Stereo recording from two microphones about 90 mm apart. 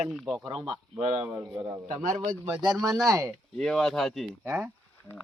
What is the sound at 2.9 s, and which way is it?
Speech, 40° right (ahead or behind).